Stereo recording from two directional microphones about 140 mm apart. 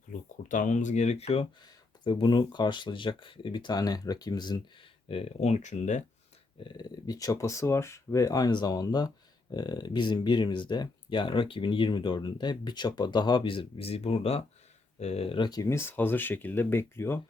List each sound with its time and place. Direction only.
0.1 s speech: 70° left (ahead or behind); by 1.5 s 45° left (ahead or behind)
2.0 s speech: 35° left (ahead or behind)
5.0 s speech: 45° left (ahead or behind)
6.6 s speech: 30° left (ahead or behind); by 17.2 s 15° left (ahead or behind)